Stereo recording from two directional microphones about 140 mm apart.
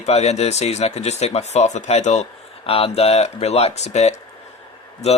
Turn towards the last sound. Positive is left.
turn(degrees=50)  # may be behind; listen again after turning